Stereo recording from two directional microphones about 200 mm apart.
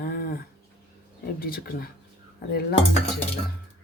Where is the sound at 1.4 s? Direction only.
45° left (ahead or behind).